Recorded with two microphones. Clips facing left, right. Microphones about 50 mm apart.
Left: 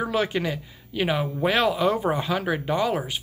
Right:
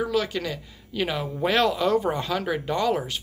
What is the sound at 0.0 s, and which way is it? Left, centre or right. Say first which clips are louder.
A woman's voice: left 1 dB; left.